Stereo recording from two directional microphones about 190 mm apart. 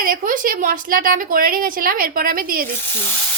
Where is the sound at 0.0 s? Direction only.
50° right (ahead or behind).